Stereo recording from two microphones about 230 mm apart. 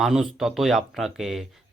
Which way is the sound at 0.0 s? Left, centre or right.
Centre.